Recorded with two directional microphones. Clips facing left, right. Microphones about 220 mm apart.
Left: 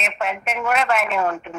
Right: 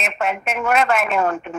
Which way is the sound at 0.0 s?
50° right (ahead or behind).